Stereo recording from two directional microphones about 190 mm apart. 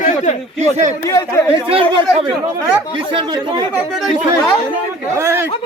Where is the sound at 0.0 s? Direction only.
35° left (ahead or behind).